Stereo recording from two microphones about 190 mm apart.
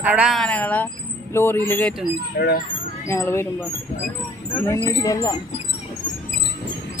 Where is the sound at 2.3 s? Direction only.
55° left (ahead or behind).